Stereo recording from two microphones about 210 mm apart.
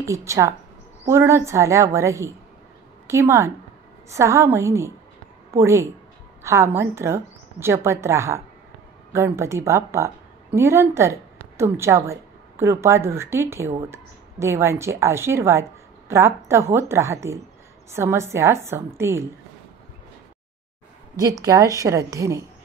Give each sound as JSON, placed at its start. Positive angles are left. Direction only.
{"t": 0.0, "sound": "a woman's voice", "side_deg": -15}
{"t": 21.2, "sound": "a woman's voice", "side_deg": -15}